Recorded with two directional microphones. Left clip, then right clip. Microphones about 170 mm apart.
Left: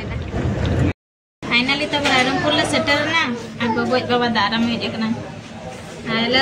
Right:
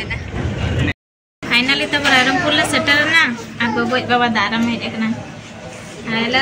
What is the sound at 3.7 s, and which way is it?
A woman's voice, 20° right (ahead or behind).